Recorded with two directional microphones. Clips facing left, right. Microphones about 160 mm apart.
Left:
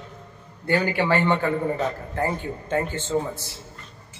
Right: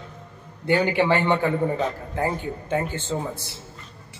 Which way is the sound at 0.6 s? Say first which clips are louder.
Right 2 dB; 20° right (ahead or behind).